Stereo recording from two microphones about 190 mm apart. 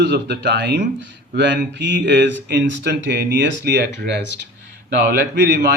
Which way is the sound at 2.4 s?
60° right (ahead or behind).